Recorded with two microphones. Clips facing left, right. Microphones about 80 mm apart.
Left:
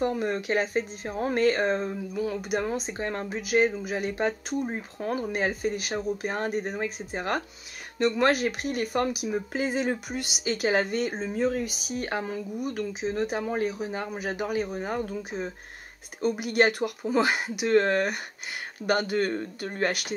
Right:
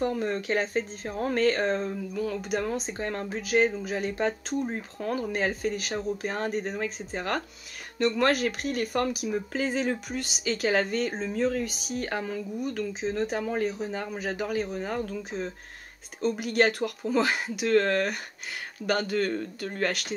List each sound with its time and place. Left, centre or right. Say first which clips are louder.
0.0 s speech: left 1 dB; centre